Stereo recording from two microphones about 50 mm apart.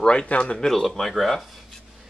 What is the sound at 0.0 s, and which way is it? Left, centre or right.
Speech, left.